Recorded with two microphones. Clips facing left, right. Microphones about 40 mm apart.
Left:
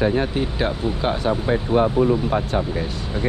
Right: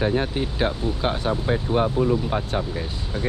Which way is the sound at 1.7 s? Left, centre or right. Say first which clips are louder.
Left 4 dB; left.